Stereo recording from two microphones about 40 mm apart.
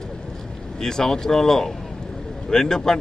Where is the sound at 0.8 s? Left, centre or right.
Centre.